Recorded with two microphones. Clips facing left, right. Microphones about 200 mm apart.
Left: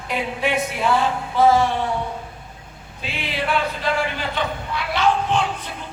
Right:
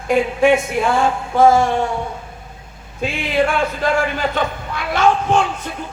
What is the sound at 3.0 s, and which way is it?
A man's voice, 50° right (ahead or behind).